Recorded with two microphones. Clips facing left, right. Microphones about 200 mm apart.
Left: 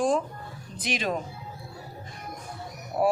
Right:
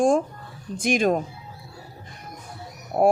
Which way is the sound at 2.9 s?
55° right (ahead or behind).